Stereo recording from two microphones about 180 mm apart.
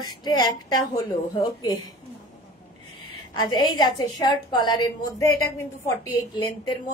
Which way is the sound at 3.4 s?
25° left (ahead or behind).